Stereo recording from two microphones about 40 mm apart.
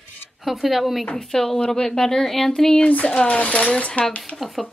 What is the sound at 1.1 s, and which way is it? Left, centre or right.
Speech, centre.